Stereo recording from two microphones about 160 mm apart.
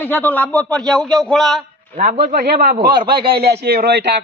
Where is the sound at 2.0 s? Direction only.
65° right (ahead or behind).